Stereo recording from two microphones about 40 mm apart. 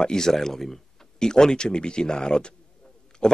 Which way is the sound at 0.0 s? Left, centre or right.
Centre.